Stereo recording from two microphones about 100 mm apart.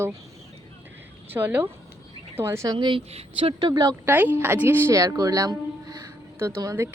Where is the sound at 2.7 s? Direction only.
60° right (ahead or behind); by 3.5 s 80° right.